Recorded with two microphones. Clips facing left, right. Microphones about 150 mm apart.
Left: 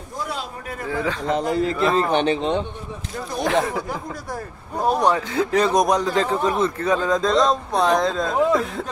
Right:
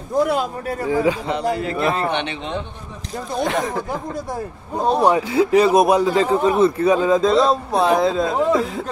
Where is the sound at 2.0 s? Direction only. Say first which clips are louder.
Left 4 dB; 40° left (ahead or behind).